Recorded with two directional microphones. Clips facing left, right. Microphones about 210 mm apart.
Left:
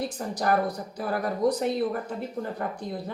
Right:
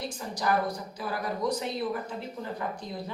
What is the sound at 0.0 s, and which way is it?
A woman's voice, 55° left (ahead or behind).